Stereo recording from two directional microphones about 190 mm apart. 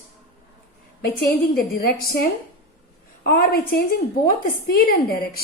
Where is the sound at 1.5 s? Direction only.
50° left (ahead or behind).